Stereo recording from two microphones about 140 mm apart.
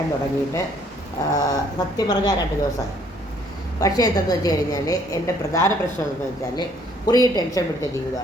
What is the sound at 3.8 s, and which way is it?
A woman's voice, 25° left (ahead or behind).